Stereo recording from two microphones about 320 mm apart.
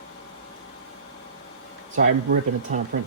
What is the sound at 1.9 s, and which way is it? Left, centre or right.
Speech, right.